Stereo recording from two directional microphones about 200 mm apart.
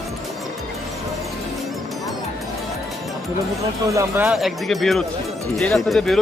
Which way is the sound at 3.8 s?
15° right (ahead or behind).